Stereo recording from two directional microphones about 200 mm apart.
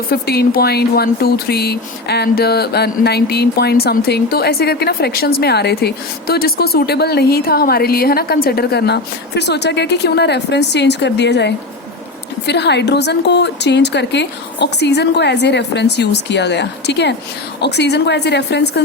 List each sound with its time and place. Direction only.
0.1 s a woman's voice: 50° left (ahead or behind)